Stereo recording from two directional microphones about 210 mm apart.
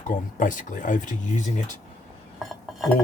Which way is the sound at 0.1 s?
40° left (ahead or behind).